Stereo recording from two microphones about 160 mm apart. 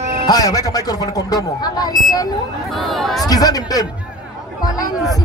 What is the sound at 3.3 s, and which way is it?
Speech, 25° left (ahead or behind).